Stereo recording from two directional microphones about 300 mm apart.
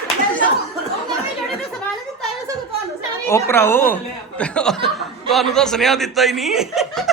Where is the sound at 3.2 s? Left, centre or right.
Centre.